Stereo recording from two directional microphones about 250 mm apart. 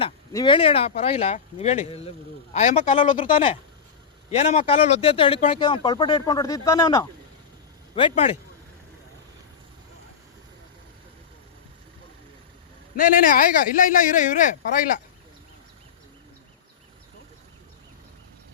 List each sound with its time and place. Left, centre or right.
0.0 s speech: centre
13.0 s speech: left